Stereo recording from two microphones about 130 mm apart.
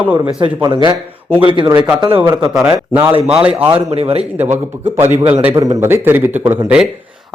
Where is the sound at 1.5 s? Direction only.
30° right (ahead or behind).